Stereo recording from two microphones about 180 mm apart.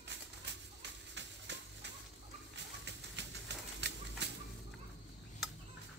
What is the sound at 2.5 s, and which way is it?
Bird, 75° right (ahead or behind).